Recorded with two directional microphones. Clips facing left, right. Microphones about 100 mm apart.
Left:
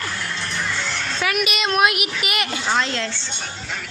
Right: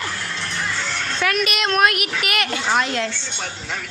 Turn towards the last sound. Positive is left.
turn(degrees=-15)  # may be behind; listen again after turning